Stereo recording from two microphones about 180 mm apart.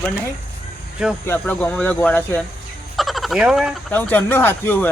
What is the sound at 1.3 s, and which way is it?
Speech, 10° left (ahead or behind).